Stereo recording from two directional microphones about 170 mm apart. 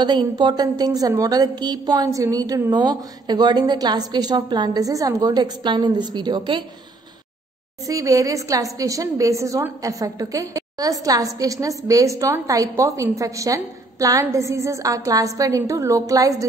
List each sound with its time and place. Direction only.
0.0 s a woman's voice: 25° right (ahead or behind)
7.8 s a woman's voice: 20° right (ahead or behind)